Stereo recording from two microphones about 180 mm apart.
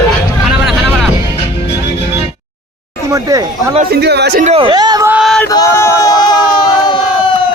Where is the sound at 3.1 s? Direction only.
15° right (ahead or behind).